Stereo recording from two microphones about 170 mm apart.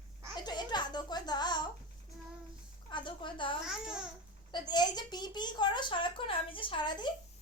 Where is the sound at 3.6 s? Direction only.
5° right (ahead or behind).